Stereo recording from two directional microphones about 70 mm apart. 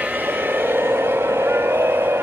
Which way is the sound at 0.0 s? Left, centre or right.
Right.